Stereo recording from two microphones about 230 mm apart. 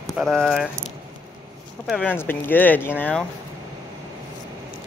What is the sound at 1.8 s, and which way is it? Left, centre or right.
Speech, centre.